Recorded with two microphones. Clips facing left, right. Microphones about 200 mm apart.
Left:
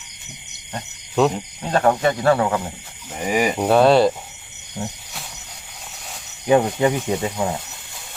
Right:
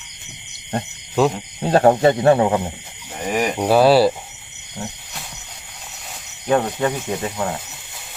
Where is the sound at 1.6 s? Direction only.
35° right (ahead or behind).